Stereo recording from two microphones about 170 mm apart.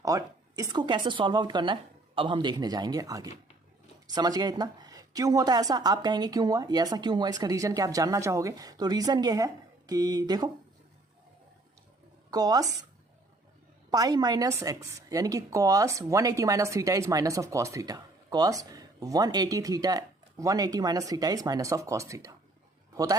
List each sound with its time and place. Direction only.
0.0 s a woman's voice: 20° right (ahead or behind)
12.3 s a woman's voice: 20° right (ahead or behind)
13.9 s a woman's voice: 20° right (ahead or behind)